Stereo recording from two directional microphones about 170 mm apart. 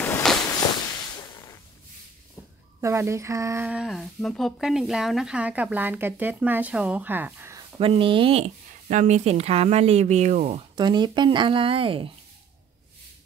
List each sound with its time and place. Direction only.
0.0 s walk: 5° left (ahead or behind)
0.6 s a sound: 25° left (ahead or behind)
2.8 s speech: 15° right (ahead or behind)
3.6 s speech: 5° right (ahead or behind)
7.8 s speech: 30° right (ahead or behind)
10.8 s speech: 25° right (ahead or behind)